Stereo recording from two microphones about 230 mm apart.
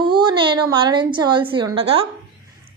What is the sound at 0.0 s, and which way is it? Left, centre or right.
A woman's voice, centre.